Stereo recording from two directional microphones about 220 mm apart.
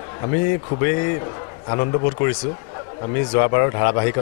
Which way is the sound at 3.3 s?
20° left (ahead or behind).